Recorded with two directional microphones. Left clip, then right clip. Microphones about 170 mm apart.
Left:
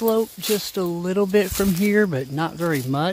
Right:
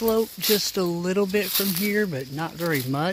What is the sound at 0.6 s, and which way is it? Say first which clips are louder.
Speech: even; 5° left (ahead or behind).